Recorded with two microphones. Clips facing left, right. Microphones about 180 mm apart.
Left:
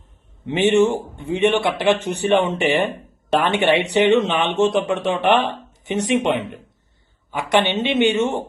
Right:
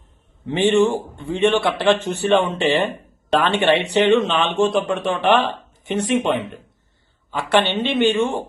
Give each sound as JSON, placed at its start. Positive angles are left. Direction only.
{"t": 0.4, "sound": "a man's voice", "side_deg": 20}